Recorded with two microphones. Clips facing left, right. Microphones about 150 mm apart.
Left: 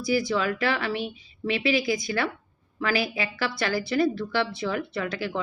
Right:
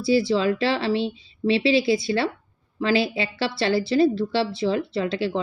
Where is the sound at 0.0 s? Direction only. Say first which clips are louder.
Right 5 dB; 25° right (ahead or behind).